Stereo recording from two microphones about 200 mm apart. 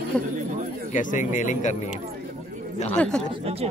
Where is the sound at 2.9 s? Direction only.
5° left (ahead or behind).